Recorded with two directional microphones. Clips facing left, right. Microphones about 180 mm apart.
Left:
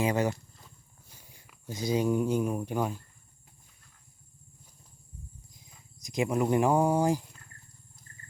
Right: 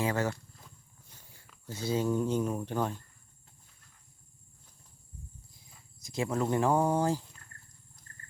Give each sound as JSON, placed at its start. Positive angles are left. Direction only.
{"t": 0.0, "sound": "speech", "side_deg": 15}
{"t": 5.5, "sound": "speech", "side_deg": 20}